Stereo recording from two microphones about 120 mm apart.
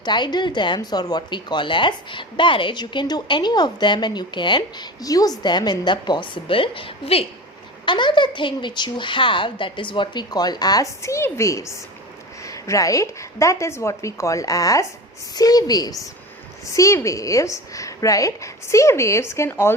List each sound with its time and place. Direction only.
0.0 s speech: 40° left (ahead or behind); by 7.3 s 55° left (ahead or behind)
7.9 s a woman's voice: 40° left (ahead or behind); by 19.7 s 20° left (ahead or behind)